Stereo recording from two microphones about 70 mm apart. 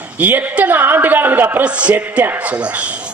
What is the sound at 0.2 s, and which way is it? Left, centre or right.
Speech, right.